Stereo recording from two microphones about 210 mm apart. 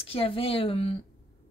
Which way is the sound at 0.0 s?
25° left (ahead or behind).